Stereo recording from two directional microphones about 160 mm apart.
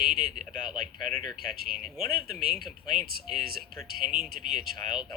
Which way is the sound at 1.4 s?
65° right (ahead or behind).